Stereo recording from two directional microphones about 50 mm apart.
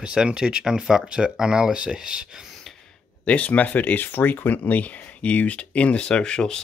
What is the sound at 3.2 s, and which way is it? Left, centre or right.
Speech, left.